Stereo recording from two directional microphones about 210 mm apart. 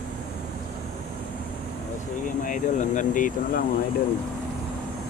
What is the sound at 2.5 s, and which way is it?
Speech, 35° left (ahead or behind).